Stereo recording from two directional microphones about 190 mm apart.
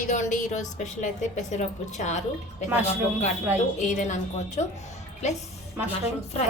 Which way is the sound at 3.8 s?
40° left (ahead or behind).